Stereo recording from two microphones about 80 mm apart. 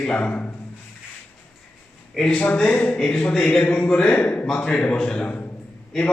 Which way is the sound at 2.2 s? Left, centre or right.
Centre.